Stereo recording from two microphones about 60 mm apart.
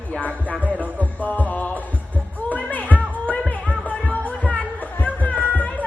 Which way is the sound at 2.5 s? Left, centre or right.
Left.